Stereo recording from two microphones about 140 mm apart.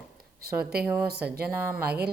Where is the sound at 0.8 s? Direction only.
10° right (ahead or behind).